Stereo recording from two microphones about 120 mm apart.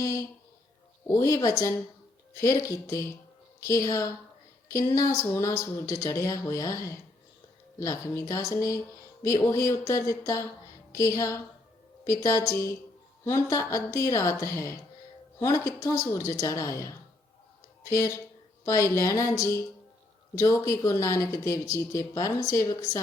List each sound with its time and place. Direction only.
0.0 s speech: 25° left (ahead or behind)